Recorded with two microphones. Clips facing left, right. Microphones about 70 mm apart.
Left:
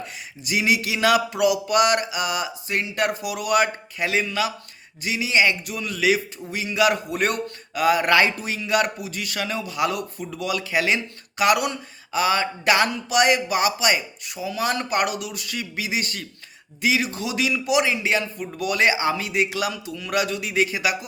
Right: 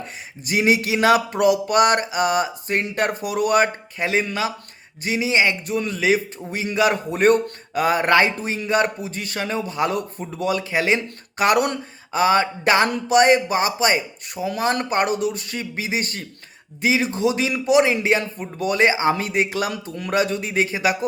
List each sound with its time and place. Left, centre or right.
0.4 s a man's voice: right
19.1 s a man's voice: right